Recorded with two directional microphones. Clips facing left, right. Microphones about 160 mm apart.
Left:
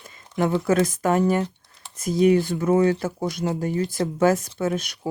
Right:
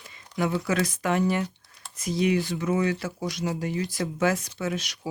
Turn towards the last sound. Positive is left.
turn(degrees=50)  # may be behind; listen again after turning